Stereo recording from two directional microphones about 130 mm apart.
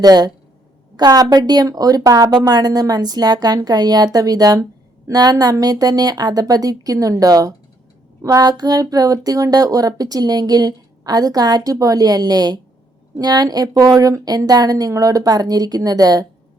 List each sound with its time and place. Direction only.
0.0 s speech: 30° right (ahead or behind)